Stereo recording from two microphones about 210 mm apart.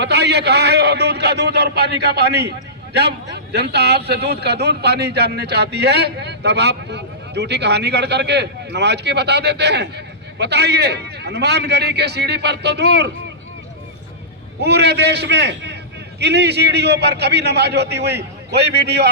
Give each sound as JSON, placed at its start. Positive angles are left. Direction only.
{"t": 0.0, "sound": "a man's voice", "side_deg": -55}
{"t": 14.6, "sound": "a man's voice", "side_deg": -55}